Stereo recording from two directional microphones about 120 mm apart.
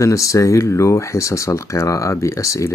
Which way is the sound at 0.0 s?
25° left (ahead or behind).